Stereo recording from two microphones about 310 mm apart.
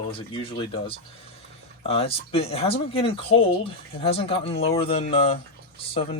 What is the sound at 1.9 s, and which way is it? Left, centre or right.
Speech, centre.